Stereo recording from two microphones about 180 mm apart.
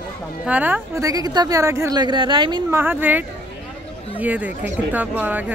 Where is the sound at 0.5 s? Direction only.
10° right (ahead or behind); by 2.6 s 25° right (ahead or behind).